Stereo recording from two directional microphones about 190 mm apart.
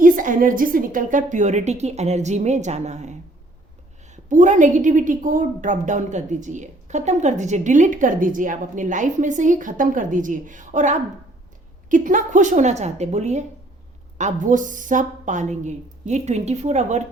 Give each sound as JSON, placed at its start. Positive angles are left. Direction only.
{"t": 0.0, "sound": "a woman's voice", "side_deg": -45}